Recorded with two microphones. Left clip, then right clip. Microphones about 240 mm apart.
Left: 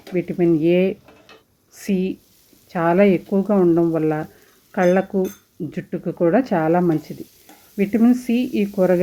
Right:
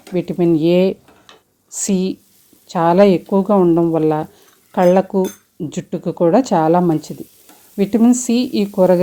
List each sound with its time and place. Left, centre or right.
0.1 s speech: right